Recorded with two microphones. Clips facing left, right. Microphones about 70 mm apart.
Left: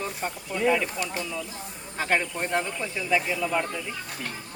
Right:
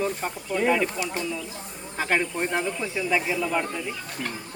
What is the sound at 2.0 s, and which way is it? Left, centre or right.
Speech, centre.